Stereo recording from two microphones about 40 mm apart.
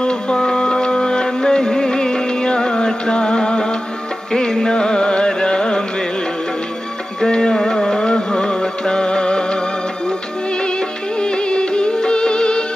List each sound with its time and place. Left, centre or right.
0.0 s music: left
7.2 s music: left
7.5 s music: centre
11.1 s music: left